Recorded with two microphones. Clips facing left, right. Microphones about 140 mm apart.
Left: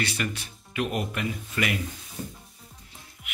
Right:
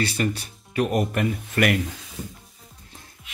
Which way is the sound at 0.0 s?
35° right (ahead or behind).